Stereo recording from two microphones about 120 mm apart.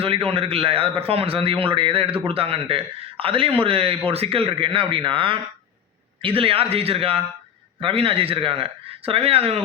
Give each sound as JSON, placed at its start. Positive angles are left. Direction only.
{"t": 0.0, "sound": "a man's voice", "side_deg": -50}